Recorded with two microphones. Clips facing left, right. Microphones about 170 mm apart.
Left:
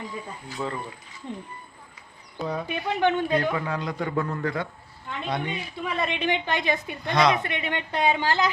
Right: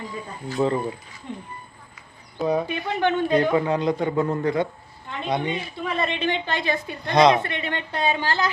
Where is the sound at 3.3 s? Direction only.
20° right (ahead or behind).